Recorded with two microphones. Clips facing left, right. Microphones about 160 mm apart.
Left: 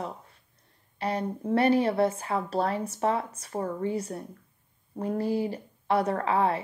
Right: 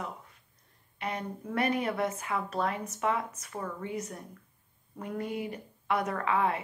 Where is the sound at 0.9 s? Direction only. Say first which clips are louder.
Left 6 dB; 35° left (ahead or behind).